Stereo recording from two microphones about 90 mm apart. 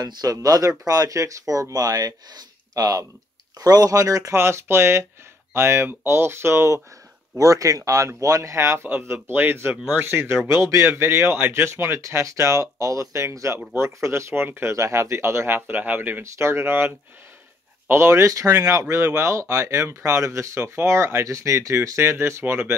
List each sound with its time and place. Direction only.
0.0 s speech: 50° right (ahead or behind); by 22.8 s 25° right (ahead or behind)